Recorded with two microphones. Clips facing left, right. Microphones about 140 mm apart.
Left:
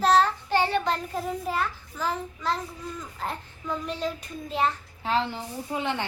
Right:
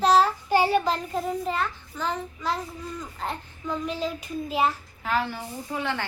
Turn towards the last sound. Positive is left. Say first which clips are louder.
# left 1 dB
turn(degrees=20)  # may be behind; listen again after turning